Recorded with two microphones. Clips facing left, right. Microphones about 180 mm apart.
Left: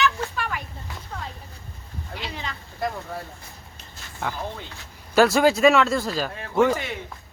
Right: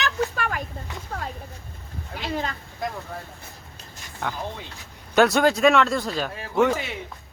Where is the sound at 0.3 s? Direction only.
45° right (ahead or behind).